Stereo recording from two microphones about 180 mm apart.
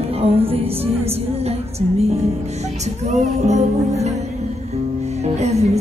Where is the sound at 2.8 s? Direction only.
40° right (ahead or behind).